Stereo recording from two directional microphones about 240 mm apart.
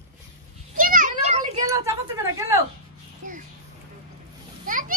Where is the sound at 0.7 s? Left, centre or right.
Right.